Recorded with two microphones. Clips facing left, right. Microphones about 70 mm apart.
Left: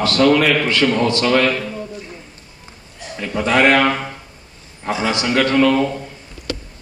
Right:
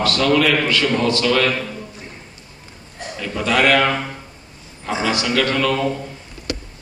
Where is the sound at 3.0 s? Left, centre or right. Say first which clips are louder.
Right 2 dB; right.